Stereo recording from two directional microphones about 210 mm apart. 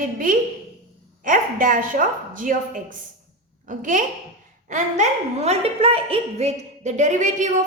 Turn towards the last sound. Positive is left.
turn(degrees=-35)  # may be behind; listen again after turning